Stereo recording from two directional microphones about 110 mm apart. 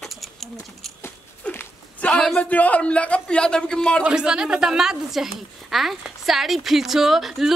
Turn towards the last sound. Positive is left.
turn(degrees=0)  # may be behind; listen again after turning